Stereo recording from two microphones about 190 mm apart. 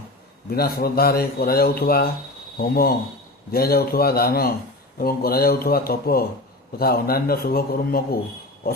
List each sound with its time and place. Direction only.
0.5 s speech: 55° left (ahead or behind)